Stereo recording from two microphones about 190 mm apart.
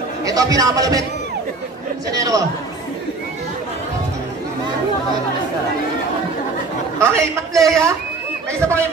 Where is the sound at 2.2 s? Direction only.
15° right (ahead or behind).